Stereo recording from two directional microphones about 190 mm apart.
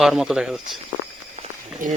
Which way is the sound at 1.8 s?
45° right (ahead or behind).